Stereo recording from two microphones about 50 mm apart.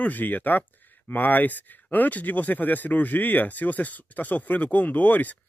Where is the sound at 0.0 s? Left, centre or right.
Left.